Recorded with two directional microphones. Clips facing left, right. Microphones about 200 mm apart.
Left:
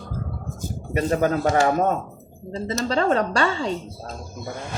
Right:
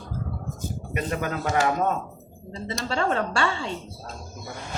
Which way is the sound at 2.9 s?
35° left (ahead or behind).